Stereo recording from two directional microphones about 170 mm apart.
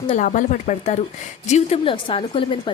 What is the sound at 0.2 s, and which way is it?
A woman's voice, 50° left (ahead or behind).